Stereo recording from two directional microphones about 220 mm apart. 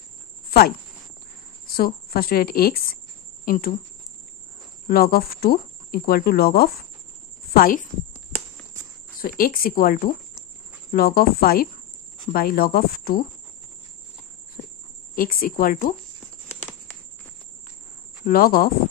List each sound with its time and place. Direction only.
0.5 s a sound: 45° left (ahead or behind)
1.8 s speech: 40° left (ahead or behind)
4.8 s speech: 40° left (ahead or behind)
9.2 s speech: 40° left (ahead or behind)
15.1 s speech: 40° left (ahead or behind)
18.2 s speech: 40° left (ahead or behind)